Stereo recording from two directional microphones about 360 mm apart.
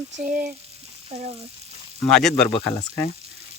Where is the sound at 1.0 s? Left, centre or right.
Centre.